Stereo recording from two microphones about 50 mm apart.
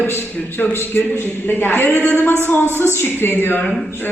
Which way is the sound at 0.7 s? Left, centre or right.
Left.